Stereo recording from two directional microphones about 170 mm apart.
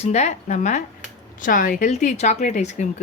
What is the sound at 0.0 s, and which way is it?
A woman's voice, 40° left (ahead or behind).